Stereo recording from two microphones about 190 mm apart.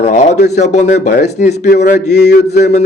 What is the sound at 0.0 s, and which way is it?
A man's voice, 40° left (ahead or behind).